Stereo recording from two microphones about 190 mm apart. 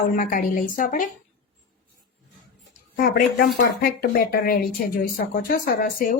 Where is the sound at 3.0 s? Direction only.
50° left (ahead or behind).